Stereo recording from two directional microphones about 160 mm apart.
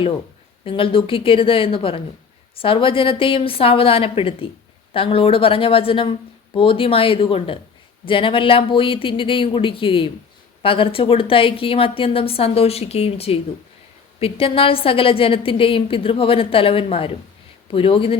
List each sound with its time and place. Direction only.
0.6 s a woman's voice: 35° left (ahead or behind)